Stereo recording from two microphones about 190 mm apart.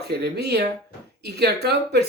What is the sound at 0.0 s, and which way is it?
Speech, 60° right (ahead or behind).